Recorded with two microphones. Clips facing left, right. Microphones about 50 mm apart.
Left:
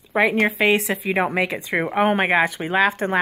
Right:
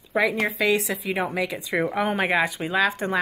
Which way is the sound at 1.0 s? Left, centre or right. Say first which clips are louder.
Left 5 dB; left.